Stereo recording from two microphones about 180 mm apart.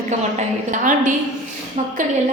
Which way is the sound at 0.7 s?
45° right (ahead or behind).